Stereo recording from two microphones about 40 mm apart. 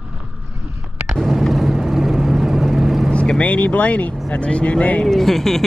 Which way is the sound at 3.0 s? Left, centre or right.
Left.